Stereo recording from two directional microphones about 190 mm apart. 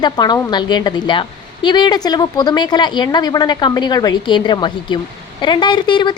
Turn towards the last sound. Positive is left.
turn(degrees=25)  # may be behind; listen again after turning